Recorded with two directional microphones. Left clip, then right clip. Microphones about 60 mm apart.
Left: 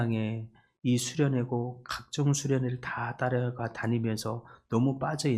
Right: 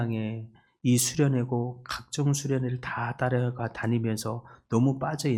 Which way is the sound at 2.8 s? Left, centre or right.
Centre.